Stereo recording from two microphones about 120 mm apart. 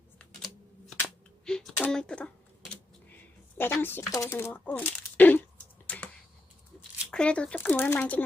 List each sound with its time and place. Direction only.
0.2 s typewriter: centre (ahead or behind)
1.0 s a sound: 5° left (ahead or behind)
3.6 s speech: 20° left (ahead or behind)
5.9 s computer keyboard: 10° left (ahead or behind)
7.1 s speech: 10° left (ahead or behind)